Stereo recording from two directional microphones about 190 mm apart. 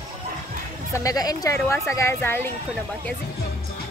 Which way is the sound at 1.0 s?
20° left (ahead or behind).